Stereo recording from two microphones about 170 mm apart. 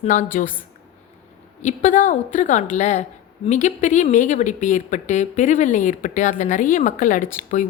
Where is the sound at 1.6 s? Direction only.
45° left (ahead or behind).